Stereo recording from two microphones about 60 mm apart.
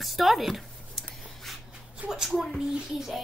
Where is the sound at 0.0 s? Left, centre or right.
Centre.